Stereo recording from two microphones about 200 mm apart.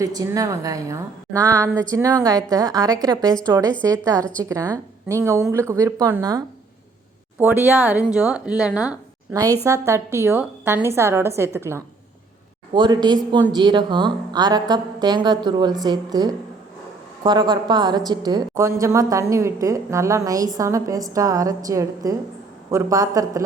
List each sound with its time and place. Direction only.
0.0 s a woman's voice: 15° right (ahead or behind)
9.3 s a woman's voice: 15° right (ahead or behind)